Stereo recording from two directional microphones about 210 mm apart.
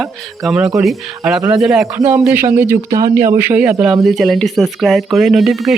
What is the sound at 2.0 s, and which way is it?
Speech, 10° right (ahead or behind).